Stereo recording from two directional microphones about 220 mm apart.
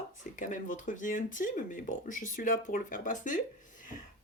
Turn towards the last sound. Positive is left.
turn(degrees=40)  # may be behind; listen again after turning